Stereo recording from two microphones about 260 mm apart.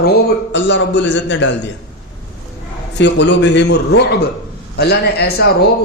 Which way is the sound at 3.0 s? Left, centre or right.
Left.